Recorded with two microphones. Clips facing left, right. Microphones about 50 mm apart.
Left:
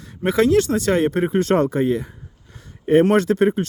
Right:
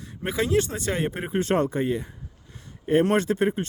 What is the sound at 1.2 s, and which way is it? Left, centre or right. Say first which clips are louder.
Speech: left 6 dB; left.